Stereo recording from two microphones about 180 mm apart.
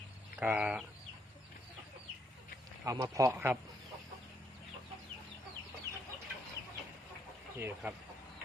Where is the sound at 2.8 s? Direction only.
20° right (ahead or behind).